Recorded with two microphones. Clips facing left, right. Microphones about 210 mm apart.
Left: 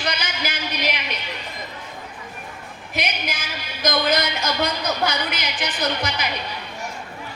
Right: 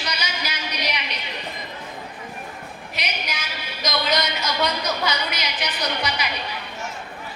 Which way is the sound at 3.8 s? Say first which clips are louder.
Left 3 dB; 50° left (ahead or behind).